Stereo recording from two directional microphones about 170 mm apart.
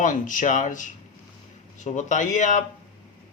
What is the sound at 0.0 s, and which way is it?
A man's voice, 50° left (ahead or behind).